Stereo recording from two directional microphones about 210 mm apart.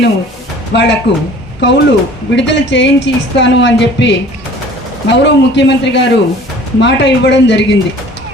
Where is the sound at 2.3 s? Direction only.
55° left (ahead or behind).